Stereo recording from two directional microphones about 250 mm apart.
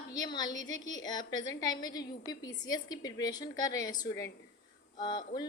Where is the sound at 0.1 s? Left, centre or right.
Centre.